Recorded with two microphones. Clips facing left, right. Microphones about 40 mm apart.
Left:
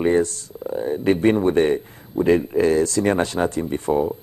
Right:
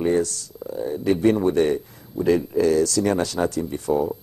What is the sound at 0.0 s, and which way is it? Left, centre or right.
Speech, left.